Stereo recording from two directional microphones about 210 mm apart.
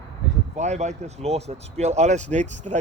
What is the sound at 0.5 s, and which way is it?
Speech, 35° right (ahead or behind).